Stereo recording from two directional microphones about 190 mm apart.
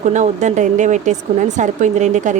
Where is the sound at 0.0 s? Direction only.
40° right (ahead or behind).